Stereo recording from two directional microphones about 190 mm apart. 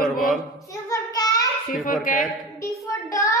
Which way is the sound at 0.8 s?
20° left (ahead or behind).